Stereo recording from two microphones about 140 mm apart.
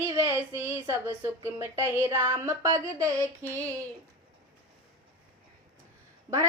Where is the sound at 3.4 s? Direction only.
15° left (ahead or behind).